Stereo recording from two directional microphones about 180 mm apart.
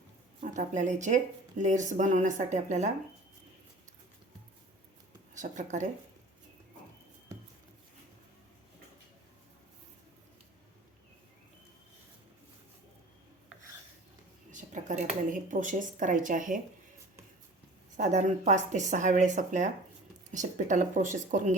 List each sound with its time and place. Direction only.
0.4 s speech: 45° right (ahead or behind)
5.3 s a woman's voice: 45° right (ahead or behind)
14.5 s speech: 45° right (ahead or behind)
17.9 s speech: 45° right (ahead or behind)